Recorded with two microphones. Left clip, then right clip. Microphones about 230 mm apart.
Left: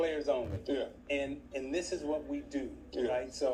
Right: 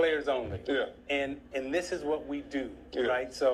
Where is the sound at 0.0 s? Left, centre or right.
Right.